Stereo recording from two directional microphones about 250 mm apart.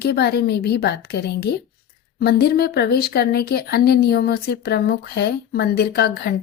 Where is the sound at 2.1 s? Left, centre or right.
Left.